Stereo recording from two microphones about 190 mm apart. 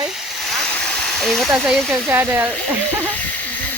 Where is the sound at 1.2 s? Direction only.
Centre (ahead or behind).